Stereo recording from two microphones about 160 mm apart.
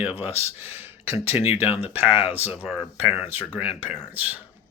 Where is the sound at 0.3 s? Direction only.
40° left (ahead or behind).